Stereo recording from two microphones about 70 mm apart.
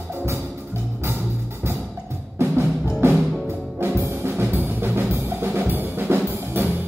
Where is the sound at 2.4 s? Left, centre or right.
Right.